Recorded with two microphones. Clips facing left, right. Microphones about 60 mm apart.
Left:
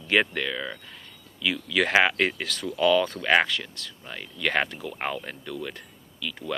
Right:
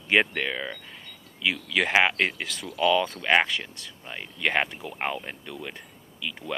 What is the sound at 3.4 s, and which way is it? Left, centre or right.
Speech, right.